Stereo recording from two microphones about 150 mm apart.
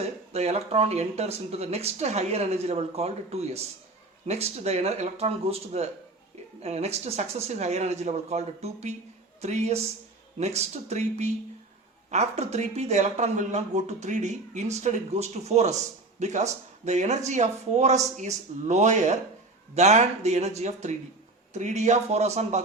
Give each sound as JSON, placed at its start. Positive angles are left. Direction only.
{"t": 0.0, "sound": "speech", "side_deg": -45}